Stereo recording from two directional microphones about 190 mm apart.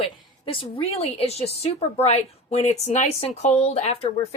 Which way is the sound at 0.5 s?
30° left (ahead or behind).